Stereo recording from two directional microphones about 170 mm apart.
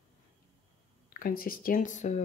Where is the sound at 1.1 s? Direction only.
55° left (ahead or behind).